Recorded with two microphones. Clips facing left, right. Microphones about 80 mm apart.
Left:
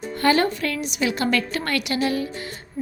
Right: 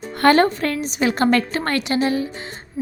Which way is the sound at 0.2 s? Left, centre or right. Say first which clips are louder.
Right 5 dB; right.